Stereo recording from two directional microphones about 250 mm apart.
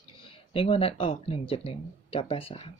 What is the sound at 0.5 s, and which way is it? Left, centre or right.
Speech, left.